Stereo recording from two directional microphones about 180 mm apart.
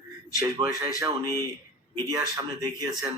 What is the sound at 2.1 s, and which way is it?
Speech, 20° right (ahead or behind).